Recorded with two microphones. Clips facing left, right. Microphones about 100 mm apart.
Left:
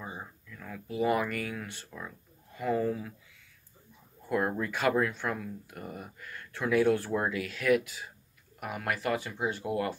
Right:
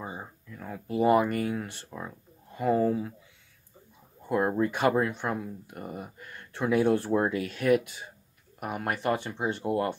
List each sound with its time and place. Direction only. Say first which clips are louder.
0.2 s a sound: right 3 dB; 30° right (ahead or behind)
1.0 s speech: right 6 dB; 30° right (ahead or behind)
4.3 s speech: right 4 dB; 25° right (ahead or behind)